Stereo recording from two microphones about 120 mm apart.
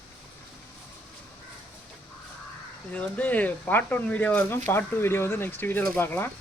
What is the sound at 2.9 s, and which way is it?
Speech, 10° left (ahead or behind).